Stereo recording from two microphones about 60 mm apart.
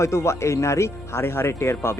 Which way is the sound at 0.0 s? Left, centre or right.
Left.